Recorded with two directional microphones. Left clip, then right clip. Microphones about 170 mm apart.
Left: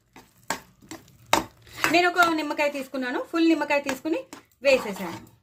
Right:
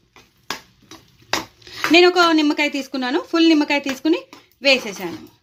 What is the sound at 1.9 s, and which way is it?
Speech, 55° right (ahead or behind).